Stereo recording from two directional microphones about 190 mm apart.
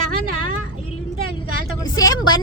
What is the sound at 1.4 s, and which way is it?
A woman's voice, 20° left (ahead or behind).